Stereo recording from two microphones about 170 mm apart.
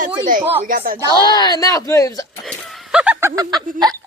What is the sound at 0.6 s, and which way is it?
Speech, 55° right (ahead or behind).